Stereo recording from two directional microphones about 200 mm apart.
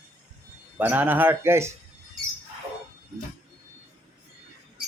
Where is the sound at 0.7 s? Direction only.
10° right (ahead or behind).